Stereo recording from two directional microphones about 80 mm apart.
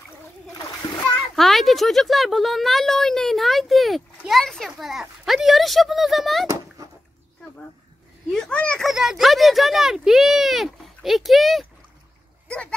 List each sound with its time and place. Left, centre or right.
0.8 s splash: left
1.3 s speech: centre
8.5 s speech: centre
8.8 s speech: centre